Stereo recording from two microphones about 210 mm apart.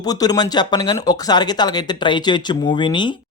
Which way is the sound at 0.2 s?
20° left (ahead or behind).